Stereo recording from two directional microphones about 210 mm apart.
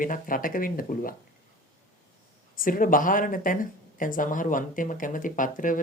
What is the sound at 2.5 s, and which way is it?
Speech, 40° left (ahead or behind).